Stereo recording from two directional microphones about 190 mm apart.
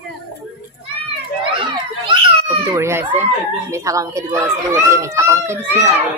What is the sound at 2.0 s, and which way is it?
Cat, 20° right (ahead or behind).